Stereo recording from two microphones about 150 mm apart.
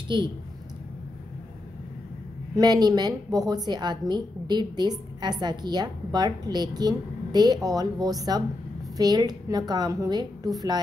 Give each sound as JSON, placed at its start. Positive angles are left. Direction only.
{"t": 0.1, "sound": "a woman's voice", "side_deg": -30}
{"t": 2.5, "sound": "a woman's voice", "side_deg": -25}